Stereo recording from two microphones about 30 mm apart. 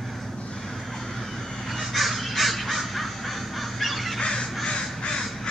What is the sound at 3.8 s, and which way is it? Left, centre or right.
Goose, centre.